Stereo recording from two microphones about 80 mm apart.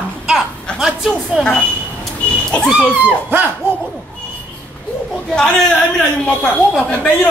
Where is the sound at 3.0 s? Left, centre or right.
Right.